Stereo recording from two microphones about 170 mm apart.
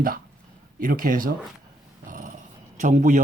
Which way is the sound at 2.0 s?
50° right (ahead or behind).